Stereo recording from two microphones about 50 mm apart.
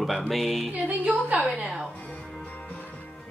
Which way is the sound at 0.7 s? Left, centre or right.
Right.